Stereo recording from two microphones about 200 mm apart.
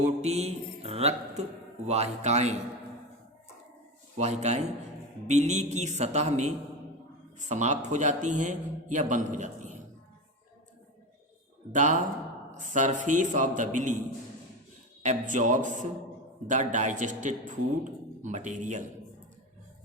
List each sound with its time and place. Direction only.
0.0 s a man's voice: 35° right (ahead or behind)
4.2 s a man's voice: 35° right (ahead or behind)
11.7 s a man's voice: 40° right (ahead or behind)
15.0 s a man's voice: 40° right (ahead or behind)